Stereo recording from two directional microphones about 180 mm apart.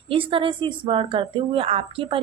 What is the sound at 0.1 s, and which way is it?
A woman's voice, 30° right (ahead or behind).